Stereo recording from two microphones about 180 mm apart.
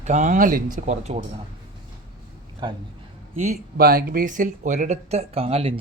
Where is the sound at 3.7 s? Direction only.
55° right (ahead or behind); by 5.7 s 30° right (ahead or behind).